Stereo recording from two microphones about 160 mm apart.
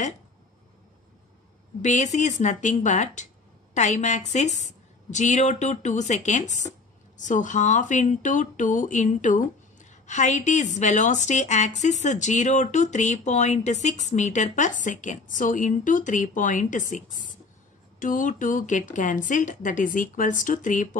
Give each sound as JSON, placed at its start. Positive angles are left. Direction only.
{"t": 1.8, "sound": "speech", "side_deg": 50}